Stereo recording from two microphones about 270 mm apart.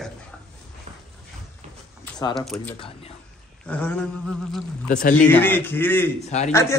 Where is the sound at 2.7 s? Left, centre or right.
Centre.